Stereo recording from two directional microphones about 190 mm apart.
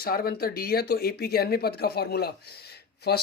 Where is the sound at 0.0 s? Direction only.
50° left (ahead or behind).